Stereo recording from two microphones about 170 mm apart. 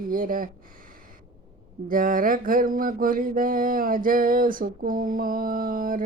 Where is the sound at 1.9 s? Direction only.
55° right (ahead or behind).